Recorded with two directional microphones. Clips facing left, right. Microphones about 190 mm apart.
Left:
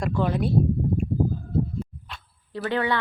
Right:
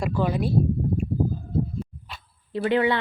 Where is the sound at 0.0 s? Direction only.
5° right (ahead or behind).